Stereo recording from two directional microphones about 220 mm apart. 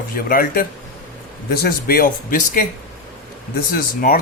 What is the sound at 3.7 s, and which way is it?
Speech, 40° left (ahead or behind).